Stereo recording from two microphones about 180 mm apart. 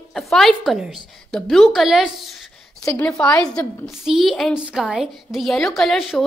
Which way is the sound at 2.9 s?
10° left (ahead or behind).